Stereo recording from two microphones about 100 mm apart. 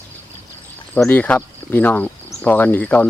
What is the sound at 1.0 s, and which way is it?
Speech, 15° left (ahead or behind).